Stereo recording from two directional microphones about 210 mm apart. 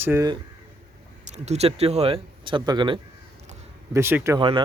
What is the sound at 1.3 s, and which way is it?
Speech, 30° right (ahead or behind).